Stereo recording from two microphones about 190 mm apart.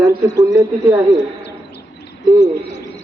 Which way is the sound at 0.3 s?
15° right (ahead or behind).